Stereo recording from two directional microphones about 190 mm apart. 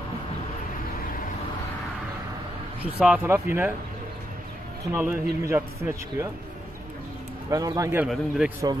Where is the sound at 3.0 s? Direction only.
5° right (ahead or behind).